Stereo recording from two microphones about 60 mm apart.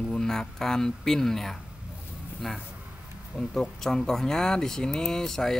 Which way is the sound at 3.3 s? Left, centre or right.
Centre.